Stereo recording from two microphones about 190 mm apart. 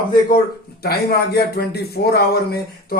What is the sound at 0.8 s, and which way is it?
Speech, 55° left (ahead or behind).